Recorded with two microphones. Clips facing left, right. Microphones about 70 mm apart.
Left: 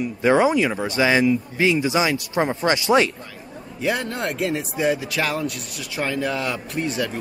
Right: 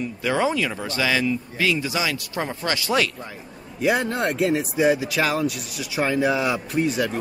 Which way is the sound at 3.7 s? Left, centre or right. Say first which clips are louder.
Right 3 dB; centre.